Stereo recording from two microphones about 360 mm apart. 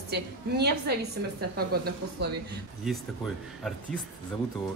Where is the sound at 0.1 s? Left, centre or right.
Right.